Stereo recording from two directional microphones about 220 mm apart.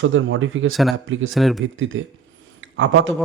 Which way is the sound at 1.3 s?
Centre (ahead or behind).